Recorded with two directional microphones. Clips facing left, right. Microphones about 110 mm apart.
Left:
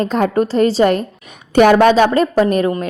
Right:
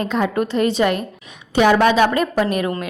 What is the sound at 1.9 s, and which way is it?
Speech, 35° left (ahead or behind).